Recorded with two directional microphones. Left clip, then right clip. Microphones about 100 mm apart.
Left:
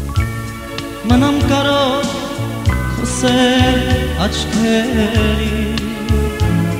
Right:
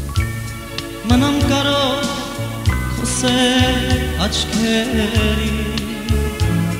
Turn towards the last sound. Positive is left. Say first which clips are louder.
# left 2 dB
turn(degrees=35)  # may be behind; listen again after turning